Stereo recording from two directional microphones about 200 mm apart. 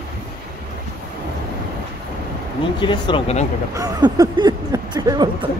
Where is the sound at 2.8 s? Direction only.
25° left (ahead or behind).